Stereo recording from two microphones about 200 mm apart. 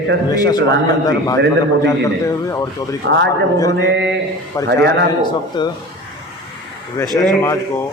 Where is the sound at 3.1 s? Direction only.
60° right (ahead or behind).